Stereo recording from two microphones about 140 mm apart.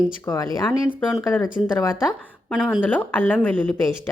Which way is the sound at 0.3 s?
20° left (ahead or behind).